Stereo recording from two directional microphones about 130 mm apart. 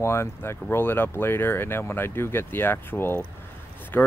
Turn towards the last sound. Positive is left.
turn(degrees=15)  # may be behind; listen again after turning